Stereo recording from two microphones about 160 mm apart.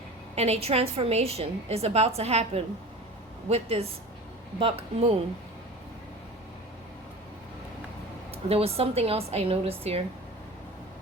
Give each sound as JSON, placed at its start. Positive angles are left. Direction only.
{"t": 0.3, "sound": "a woman's voice", "side_deg": -40}
{"t": 8.4, "sound": "a woman's voice", "side_deg": -40}